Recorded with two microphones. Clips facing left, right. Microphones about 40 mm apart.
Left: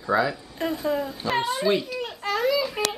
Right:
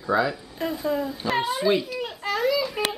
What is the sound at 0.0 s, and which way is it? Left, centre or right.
Speech, centre.